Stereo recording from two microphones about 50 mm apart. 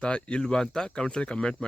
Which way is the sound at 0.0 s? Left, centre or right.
Left.